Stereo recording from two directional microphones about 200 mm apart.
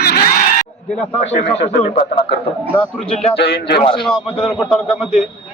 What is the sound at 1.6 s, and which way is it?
Speech, 35° left (ahead or behind).